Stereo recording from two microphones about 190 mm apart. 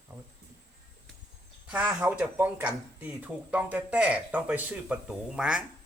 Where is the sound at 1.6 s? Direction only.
5° right (ahead or behind).